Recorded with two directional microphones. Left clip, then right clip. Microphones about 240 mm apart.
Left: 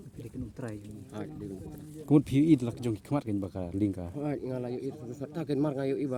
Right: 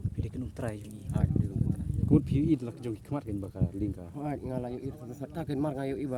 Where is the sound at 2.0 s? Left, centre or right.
Left.